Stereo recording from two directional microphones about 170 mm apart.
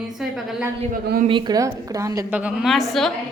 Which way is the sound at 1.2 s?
25° right (ahead or behind).